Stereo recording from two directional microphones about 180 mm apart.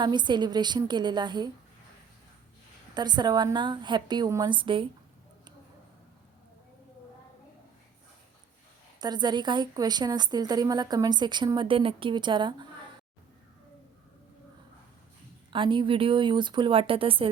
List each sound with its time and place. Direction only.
0.0 s a woman's voice: 25° right (ahead or behind)
2.9 s a woman's voice: 25° right (ahead or behind)
9.0 s a woman's voice: 25° right (ahead or behind)
15.5 s a woman's voice: 25° right (ahead or behind)